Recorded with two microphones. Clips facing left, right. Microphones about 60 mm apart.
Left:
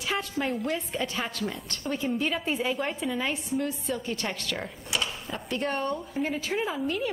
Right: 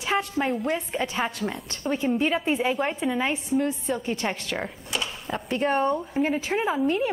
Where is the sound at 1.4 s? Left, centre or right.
Centre.